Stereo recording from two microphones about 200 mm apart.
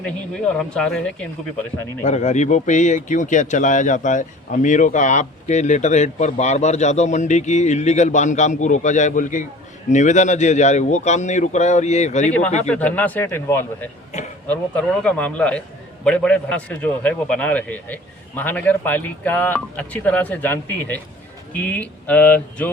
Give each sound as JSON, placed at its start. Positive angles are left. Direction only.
{"t": 0.0, "sound": "speech", "side_deg": 5}
{"t": 2.0, "sound": "speech", "side_deg": 35}
{"t": 12.6, "sound": "a man's voice", "side_deg": 5}